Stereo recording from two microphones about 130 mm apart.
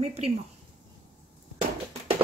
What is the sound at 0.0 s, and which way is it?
Speech, 50° right (ahead or behind).